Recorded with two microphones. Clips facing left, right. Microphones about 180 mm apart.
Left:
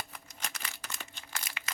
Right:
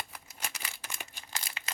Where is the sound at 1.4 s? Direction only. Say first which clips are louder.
Even; 30° right (ahead or behind).